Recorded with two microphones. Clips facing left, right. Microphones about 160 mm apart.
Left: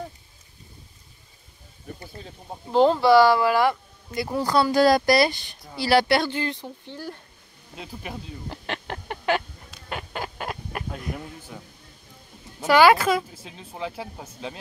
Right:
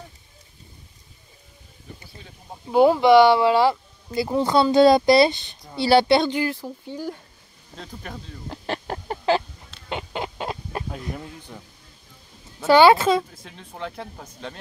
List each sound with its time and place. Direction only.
2.7 s speech: 10° right (ahead or behind)
6.4 s speech: 5° right (ahead or behind)
7.7 s speech: 10° left (ahead or behind)
8.6 s a sound: 35° right (ahead or behind)
9.8 s chicken: 25° right (ahead or behind)
10.9 s speech: 5° left (ahead or behind)
12.6 s speech: 30° right (ahead or behind)
13.3 s speech: 5° left (ahead or behind)